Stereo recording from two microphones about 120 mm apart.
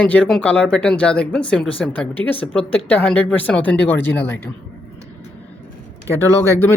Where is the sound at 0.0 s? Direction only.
10° left (ahead or behind).